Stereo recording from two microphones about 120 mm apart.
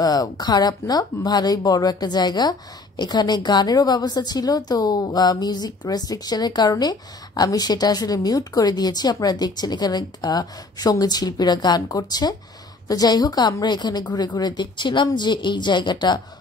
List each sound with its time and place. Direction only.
0.0 s a woman's voice: 30° left (ahead or behind)